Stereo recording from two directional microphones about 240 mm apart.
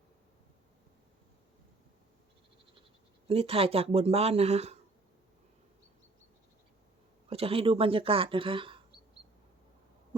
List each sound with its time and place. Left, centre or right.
3.2 s speech: right
7.3 s speech: right